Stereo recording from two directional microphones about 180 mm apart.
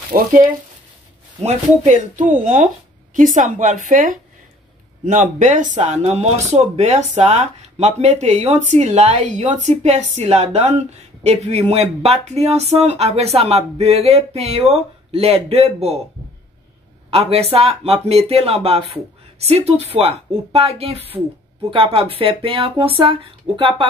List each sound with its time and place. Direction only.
0.1 s a woman's voice: 50° right (ahead or behind)
17.1 s speech: 35° right (ahead or behind)